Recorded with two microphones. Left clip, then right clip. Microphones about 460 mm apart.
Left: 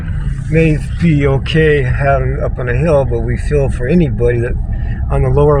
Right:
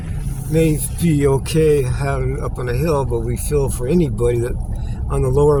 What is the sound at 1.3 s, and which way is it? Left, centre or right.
Speech, right.